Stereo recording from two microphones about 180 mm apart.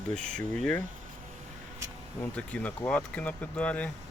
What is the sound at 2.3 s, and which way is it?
Speech, 5° left (ahead or behind).